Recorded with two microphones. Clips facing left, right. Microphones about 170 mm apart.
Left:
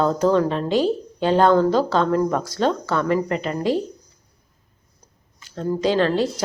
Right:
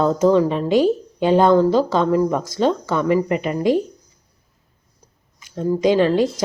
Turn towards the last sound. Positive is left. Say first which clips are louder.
# right 3 dB
turn(degrees=-10)  # may be behind; listen again after turning